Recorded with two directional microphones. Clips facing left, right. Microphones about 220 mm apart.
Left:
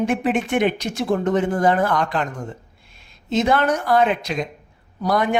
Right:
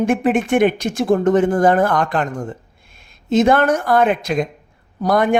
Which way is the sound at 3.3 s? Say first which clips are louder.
Right 5 dB; 50° right (ahead or behind).